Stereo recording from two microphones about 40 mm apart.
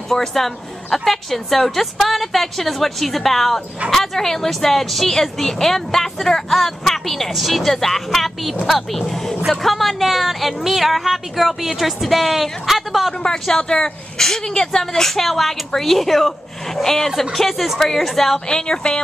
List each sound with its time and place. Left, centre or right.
0.1 s a woman's voice: centre
13.2 s a woman's voice: centre
18.5 s speech: centre